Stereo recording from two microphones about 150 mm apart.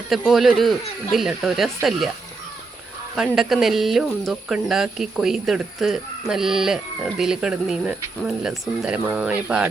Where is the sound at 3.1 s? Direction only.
Centre (ahead or behind).